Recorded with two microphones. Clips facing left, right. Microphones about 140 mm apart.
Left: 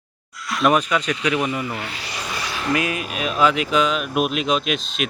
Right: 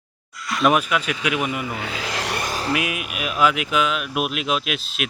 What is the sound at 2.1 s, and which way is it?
Vehicle, 75° right (ahead or behind).